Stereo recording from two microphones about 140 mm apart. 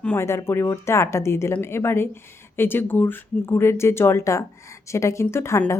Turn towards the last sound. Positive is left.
turn(degrees=20)  # may be behind; listen again after turning